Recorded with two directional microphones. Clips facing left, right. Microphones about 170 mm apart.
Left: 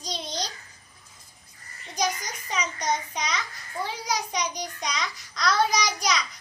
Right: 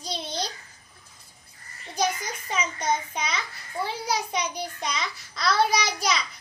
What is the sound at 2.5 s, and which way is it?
A child's voice, 5° right (ahead or behind).